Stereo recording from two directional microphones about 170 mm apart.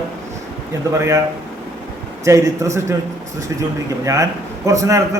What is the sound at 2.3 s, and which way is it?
Speech, 15° right (ahead or behind).